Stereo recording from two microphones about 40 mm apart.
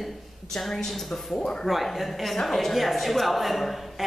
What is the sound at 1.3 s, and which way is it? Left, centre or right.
Speech, centre.